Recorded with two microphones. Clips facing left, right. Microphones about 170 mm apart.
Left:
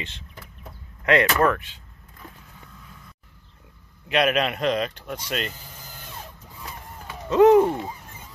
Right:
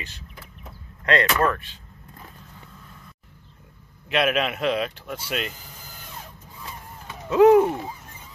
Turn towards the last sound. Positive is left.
turn(degrees=-5)  # may be behind; listen again after turning